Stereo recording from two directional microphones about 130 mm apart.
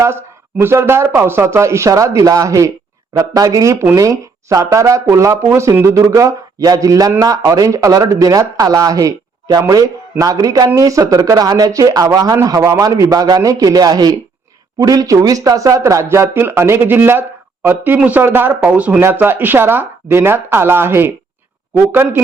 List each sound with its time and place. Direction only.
0.0 s speech: 20° right (ahead or behind)